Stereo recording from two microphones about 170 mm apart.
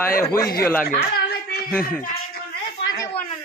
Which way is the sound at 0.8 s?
65° left (ahead or behind).